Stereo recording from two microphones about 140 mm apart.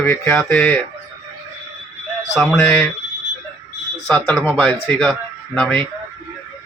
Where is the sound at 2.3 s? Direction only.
5° left (ahead or behind).